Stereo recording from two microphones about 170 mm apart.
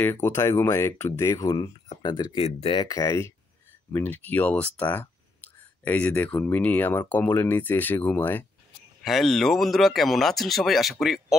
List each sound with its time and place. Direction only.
0.0 s speech: 10° left (ahead or behind)
9.0 s speech: centre (ahead or behind)